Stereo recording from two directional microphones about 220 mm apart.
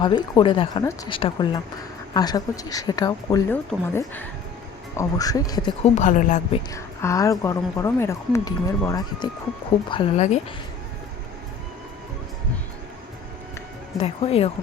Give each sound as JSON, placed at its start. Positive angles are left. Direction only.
{"t": 0.0, "sound": "a woman's voice", "side_deg": 20}
{"t": 5.8, "sound": "a woman's voice", "side_deg": 30}
{"t": 6.7, "sound": "a woman's voice", "side_deg": 15}
{"t": 9.9, "sound": "a woman's voice", "side_deg": 30}
{"t": 14.0, "sound": "speech", "side_deg": 25}